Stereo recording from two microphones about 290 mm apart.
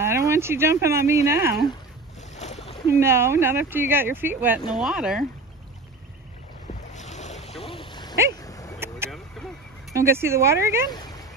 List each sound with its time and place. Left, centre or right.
0.0 s speech: centre
2.3 s boat: left
2.9 s speech: centre
6.9 s boat: left
7.7 s a sound: centre
8.7 s vehicle: centre
9.8 s speech: centre
10.9 s a sound: centre